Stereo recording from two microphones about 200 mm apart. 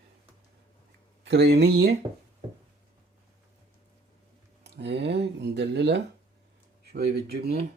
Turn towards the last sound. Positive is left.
turn(degrees=-55)  # may be behind; listen again after turning